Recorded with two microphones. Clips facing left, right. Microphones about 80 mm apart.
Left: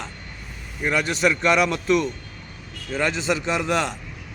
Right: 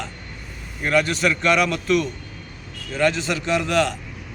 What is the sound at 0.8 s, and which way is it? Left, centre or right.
A man's voice, centre.